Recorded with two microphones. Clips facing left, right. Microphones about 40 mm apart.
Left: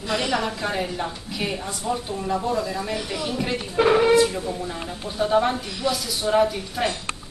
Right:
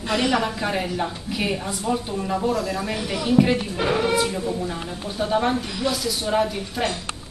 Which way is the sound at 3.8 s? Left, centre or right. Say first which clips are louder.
Left 10 dB; centre.